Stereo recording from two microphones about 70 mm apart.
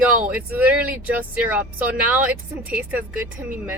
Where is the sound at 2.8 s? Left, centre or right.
Right.